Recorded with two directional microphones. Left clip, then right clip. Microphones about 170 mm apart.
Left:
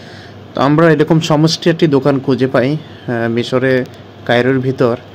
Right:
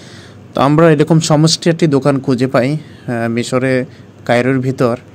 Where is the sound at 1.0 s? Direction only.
20° right (ahead or behind).